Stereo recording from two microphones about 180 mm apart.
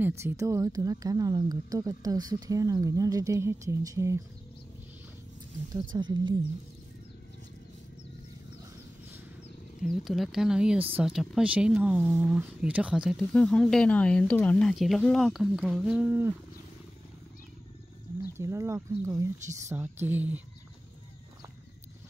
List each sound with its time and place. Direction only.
0.2 s speech: 15° right (ahead or behind)
5.7 s speech: 25° right (ahead or behind)
9.8 s speech: centre (ahead or behind)
18.4 s speech: 15° right (ahead or behind)